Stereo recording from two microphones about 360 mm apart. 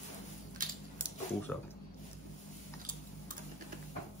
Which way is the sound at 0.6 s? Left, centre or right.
Right.